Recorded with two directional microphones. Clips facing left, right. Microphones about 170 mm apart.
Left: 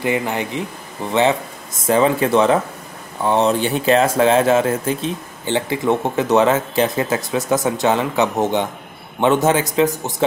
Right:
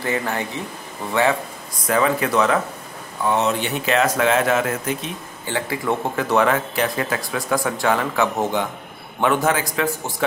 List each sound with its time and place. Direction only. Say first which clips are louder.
0.0 s speech: left 3 dB; 15° left (ahead or behind)
1.9 s speech: left 4 dB; 25° left (ahead or behind)